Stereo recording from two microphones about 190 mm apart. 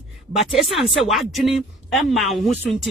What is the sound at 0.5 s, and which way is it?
Speech, centre (ahead or behind).